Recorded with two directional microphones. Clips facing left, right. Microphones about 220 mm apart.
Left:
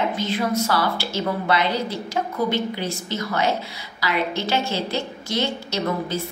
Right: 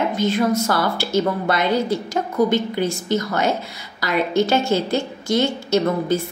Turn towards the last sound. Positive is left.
turn(degrees=-50)  # may be behind; listen again after turning